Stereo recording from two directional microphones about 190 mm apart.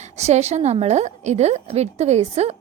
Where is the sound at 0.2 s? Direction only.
35° right (ahead or behind).